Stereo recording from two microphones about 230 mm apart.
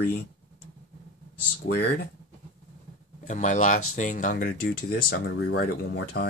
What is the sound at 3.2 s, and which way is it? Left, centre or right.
Speech, left.